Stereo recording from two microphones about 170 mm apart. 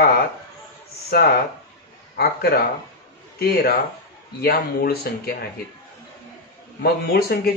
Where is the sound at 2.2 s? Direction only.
65° left (ahead or behind).